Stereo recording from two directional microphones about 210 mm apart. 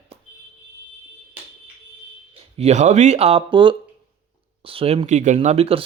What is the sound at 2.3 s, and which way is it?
Speech, 30° right (ahead or behind).